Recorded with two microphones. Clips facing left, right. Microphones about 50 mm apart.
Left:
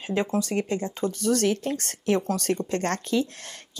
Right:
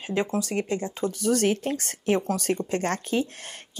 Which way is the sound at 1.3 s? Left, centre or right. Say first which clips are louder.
Right 1 dB; right.